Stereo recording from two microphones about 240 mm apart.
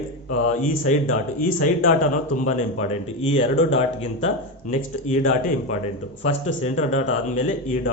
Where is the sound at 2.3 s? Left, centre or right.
Left.